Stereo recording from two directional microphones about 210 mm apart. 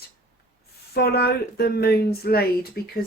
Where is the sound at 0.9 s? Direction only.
50° left (ahead or behind).